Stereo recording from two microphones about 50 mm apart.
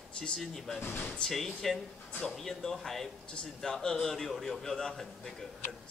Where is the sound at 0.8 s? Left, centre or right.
Left.